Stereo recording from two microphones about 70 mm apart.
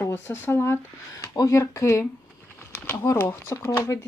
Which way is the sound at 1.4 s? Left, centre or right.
Left.